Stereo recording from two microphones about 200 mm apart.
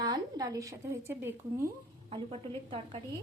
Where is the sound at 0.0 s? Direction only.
20° right (ahead or behind).